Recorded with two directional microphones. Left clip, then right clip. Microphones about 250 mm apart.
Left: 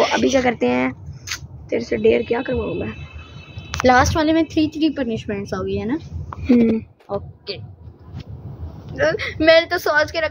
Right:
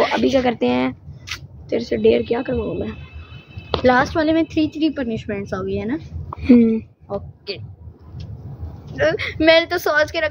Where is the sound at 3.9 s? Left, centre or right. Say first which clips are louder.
Left 2 dB; left.